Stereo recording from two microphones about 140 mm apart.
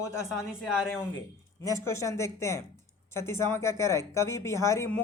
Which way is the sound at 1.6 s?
20° left (ahead or behind).